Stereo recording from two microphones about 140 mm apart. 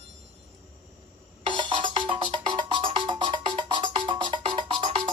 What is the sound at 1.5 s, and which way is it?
Music, 35° right (ahead or behind).